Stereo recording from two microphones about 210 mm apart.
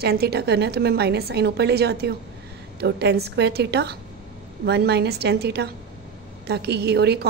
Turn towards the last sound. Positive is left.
turn(degrees=-50)  # may be behind; listen again after turning